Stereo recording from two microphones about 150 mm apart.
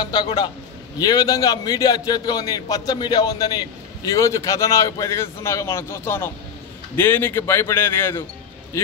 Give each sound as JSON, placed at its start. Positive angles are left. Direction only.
{"t": 0.0, "sound": "a man's voice", "side_deg": 30}